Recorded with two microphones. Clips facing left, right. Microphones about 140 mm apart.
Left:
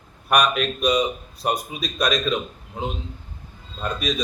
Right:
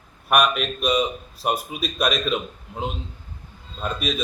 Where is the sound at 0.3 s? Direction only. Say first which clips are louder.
Even; 5° right (ahead or behind).